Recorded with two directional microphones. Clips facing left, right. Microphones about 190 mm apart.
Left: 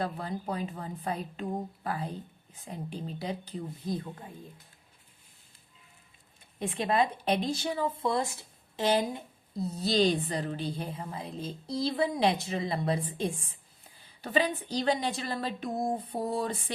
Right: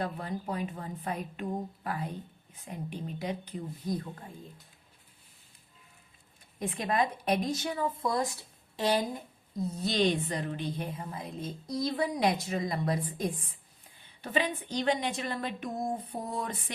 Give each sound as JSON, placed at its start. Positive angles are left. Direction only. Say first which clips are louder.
{"t": 0.0, "sound": "a woman's voice", "louder": "left 1 dB", "side_deg": 35}
{"t": 6.6, "sound": "a woman's voice", "louder": "left 2 dB", "side_deg": 30}